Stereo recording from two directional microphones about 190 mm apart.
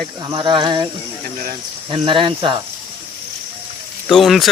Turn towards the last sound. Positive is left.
turn(degrees=0)  # may be behind; listen again after turning